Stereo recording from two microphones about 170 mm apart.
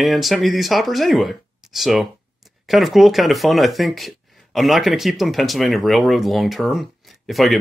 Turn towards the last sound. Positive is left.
turn(degrees=0)  # may be behind; listen again after turning